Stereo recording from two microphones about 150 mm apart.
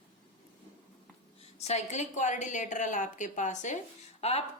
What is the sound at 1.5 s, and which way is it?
A woman's voice, 45° left (ahead or behind).